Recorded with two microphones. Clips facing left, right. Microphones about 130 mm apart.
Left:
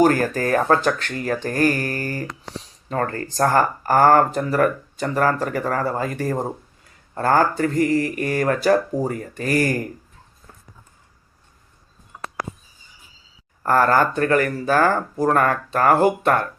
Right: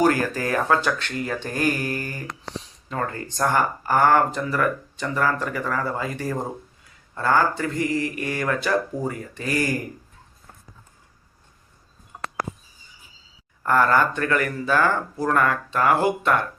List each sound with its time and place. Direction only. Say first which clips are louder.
0.0 s speech: left 3 dB; 45° left (ahead or behind)
13.6 s speech: left 2 dB; 40° left (ahead or behind)